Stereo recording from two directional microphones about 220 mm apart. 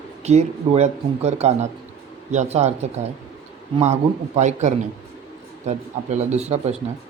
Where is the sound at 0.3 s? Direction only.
30° right (ahead or behind).